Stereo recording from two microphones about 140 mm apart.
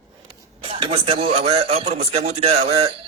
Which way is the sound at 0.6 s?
40° right (ahead or behind).